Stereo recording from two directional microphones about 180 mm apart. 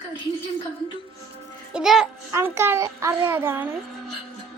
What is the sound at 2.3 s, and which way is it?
A child's voice, 15° right (ahead or behind).